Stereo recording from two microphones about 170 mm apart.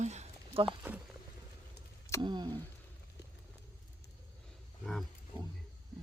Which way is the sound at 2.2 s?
25° right (ahead or behind).